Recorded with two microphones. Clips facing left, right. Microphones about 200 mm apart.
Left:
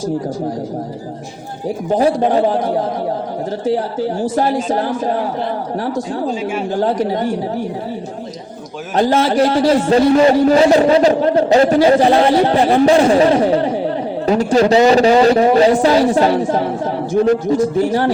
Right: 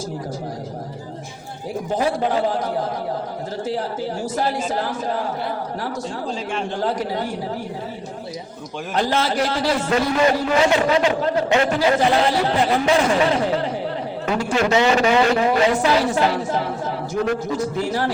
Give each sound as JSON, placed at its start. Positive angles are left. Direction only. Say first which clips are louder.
{"t": 1.9, "sound": "a man's voice", "louder": "left 7 dB", "side_deg": 35}
{"t": 6.5, "sound": "speech", "louder": "left 5 dB", "side_deg": 5}
{"t": 9.0, "sound": "a man's voice", "louder": "left 7 dB", "side_deg": 30}